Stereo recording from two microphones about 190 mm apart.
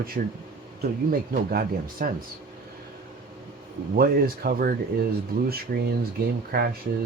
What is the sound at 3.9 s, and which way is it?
Speech, 50° right (ahead or behind).